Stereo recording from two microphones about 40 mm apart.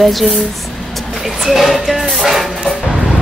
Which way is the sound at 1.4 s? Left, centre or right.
Centre.